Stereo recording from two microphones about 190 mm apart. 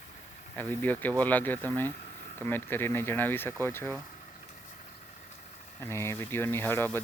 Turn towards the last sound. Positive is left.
turn(degrees=10)  # may be behind; listen again after turning